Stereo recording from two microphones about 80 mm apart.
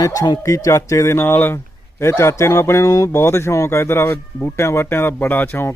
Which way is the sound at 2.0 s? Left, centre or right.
Left.